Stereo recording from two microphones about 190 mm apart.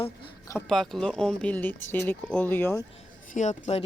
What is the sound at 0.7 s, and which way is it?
Speech, centre (ahead or behind).